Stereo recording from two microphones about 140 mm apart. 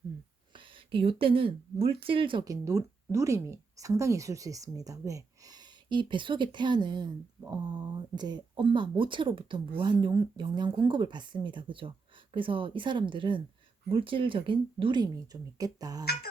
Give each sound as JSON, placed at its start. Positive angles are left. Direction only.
{"t": 0.5, "sound": "speech", "side_deg": -35}
{"t": 2.4, "sound": "a woman's voice", "side_deg": -25}